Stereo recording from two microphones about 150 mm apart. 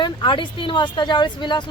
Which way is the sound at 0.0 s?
30° left (ahead or behind).